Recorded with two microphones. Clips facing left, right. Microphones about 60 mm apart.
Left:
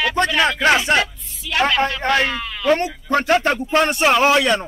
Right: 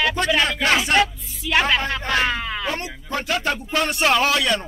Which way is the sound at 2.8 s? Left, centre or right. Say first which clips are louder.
Left 8 dB; left.